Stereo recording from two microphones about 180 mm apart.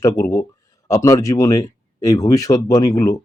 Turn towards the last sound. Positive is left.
turn(degrees=20)  # may be behind; listen again after turning